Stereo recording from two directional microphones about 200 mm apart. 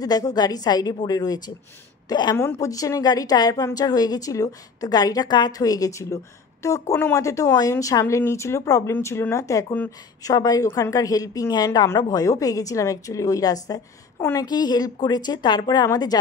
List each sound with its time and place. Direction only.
0.0 s a woman's voice: 20° left (ahead or behind)